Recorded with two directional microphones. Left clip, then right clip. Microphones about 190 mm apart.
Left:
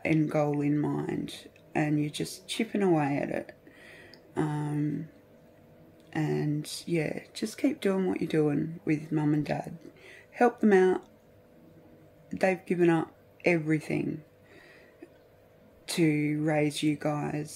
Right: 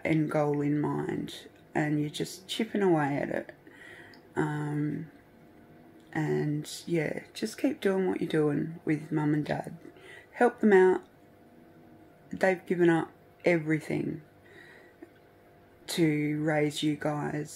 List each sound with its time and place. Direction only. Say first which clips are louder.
0.0 s speech: left 1 dB; 15° left (ahead or behind)
6.0 s speech: even; 15° left (ahead or behind)
12.3 s speech: even; 15° left (ahead or behind)
15.9 s speech: left 1 dB; 15° left (ahead or behind)